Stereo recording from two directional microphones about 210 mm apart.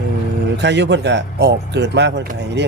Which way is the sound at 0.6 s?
55° right (ahead or behind).